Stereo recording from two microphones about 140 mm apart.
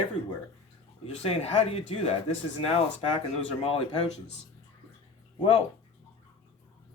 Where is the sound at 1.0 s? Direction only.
45° left (ahead or behind).